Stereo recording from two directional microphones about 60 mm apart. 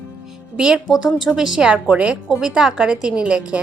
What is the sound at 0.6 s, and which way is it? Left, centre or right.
A woman's voice, centre.